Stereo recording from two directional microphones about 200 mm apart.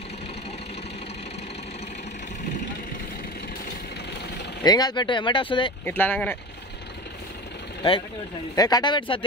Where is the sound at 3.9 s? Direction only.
55° left (ahead or behind).